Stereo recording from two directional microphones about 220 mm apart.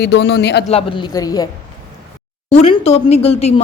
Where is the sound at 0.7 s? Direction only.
25° left (ahead or behind).